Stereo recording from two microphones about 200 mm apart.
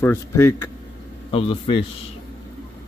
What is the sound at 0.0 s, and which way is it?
Speech, 10° left (ahead or behind).